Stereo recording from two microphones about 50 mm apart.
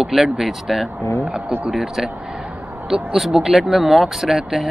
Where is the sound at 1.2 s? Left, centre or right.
Right.